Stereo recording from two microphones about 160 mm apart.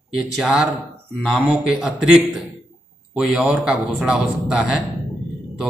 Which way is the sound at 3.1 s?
5° right (ahead or behind).